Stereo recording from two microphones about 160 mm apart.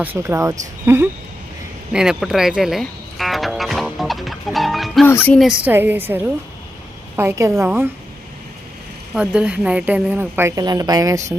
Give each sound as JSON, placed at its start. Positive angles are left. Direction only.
{"t": 0.0, "sound": "a woman's voice", "side_deg": -15}
{"t": 1.9, "sound": "music", "side_deg": -5}
{"t": 5.2, "sound": "speech", "side_deg": 5}
{"t": 5.5, "sound": "a woman's voice", "side_deg": -10}
{"t": 7.2, "sound": "a woman's voice", "side_deg": -15}
{"t": 9.1, "sound": "a woman's voice", "side_deg": -5}